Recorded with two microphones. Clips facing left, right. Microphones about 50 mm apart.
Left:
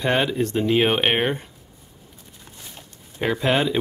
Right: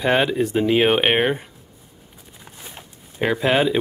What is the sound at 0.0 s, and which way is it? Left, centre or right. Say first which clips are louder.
Speech: right 3 dB; centre.